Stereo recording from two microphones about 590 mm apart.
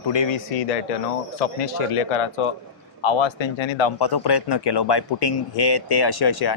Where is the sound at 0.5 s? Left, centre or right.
Left.